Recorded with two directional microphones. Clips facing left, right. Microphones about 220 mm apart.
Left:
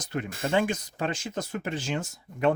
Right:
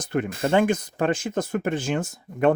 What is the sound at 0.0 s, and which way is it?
Speech, 55° right (ahead or behind).